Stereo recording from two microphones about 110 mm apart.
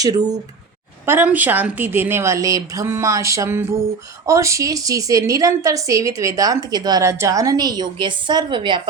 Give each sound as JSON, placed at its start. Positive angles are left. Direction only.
{"t": 0.0, "sound": "a woman's voice", "side_deg": -35}
{"t": 1.0, "sound": "a woman's voice", "side_deg": -20}